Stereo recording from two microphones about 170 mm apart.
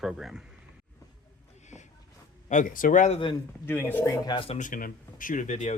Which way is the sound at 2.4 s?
50° left (ahead or behind).